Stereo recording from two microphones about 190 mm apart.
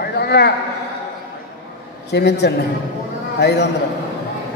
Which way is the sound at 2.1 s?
60° left (ahead or behind).